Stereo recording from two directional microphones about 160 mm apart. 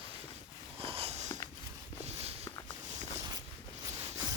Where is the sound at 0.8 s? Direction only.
35° right (ahead or behind).